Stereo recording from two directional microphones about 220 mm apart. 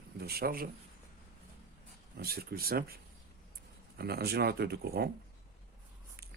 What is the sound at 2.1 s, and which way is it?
Speech, 45° right (ahead or behind).